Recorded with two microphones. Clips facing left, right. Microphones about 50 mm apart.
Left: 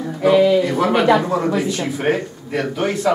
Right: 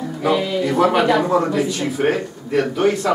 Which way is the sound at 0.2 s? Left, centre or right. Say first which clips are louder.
Left 6 dB; centre.